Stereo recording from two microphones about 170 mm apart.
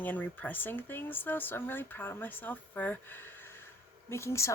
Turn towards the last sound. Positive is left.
turn(degrees=15)  # may be behind; listen again after turning